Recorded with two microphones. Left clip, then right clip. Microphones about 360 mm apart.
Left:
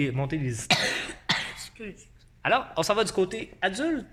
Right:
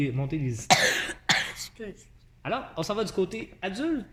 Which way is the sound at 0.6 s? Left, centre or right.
Centre.